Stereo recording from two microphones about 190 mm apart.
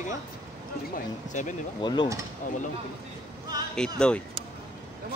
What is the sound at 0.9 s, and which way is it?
Speech, 40° left (ahead or behind).